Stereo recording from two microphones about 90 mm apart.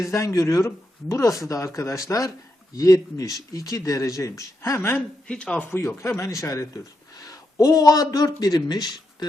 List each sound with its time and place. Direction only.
0.0 s speech: 35° left (ahead or behind)
5.3 s speech: 10° left (ahead or behind)
6.0 s speech: 30° left (ahead or behind)
7.2 s a sound: 45° left (ahead or behind)
8.4 s speech: 45° left (ahead or behind)